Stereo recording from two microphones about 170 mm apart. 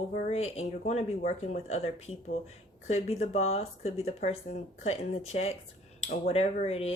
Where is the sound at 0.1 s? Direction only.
40° left (ahead or behind).